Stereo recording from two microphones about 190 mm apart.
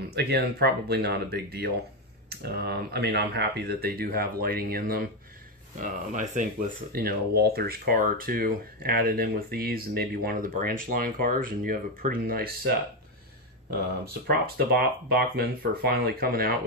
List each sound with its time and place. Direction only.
0.0 s speech: 60° right (ahead or behind)
6.9 s speech: 55° right (ahead or behind)
14.2 s speech: 55° right (ahead or behind)